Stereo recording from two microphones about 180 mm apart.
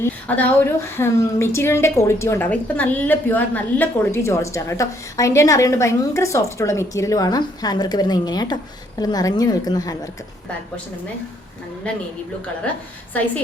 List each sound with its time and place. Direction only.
0.0 s a woman's voice: 10° left (ahead or behind)